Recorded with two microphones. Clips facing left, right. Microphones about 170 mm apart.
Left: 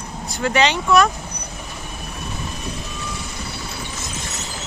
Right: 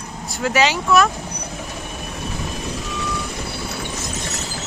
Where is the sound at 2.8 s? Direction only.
90° right.